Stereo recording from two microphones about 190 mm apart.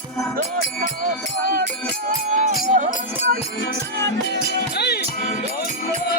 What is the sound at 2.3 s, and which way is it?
Music, 40° right (ahead or behind).